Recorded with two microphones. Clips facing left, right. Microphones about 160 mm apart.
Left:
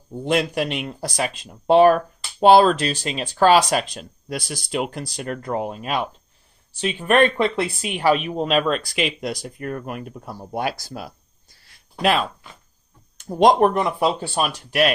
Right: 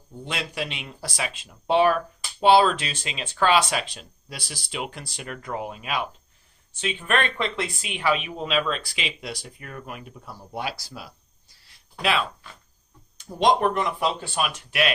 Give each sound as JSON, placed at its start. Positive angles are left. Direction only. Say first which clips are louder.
{"t": 0.3, "sound": "speech", "louder": "left 10 dB", "side_deg": 50}
{"t": 13.2, "sound": "speech", "louder": "left 5 dB", "side_deg": 45}